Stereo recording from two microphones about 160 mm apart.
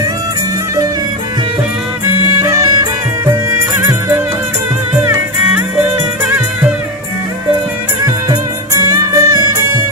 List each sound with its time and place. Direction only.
4.9 s music: 15° right (ahead or behind)
8.8 s music: 20° right (ahead or behind)